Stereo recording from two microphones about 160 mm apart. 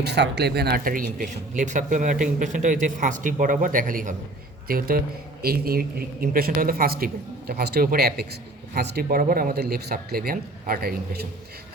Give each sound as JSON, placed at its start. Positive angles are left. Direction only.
{"t": 0.0, "sound": "speech", "side_deg": -90}
{"t": 4.7, "sound": "a man's voice", "side_deg": -70}